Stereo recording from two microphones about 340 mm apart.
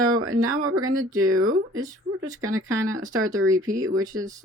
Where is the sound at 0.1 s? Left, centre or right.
Right.